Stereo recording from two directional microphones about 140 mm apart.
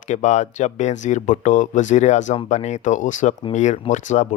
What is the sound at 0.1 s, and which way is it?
Speech, 60° left (ahead or behind).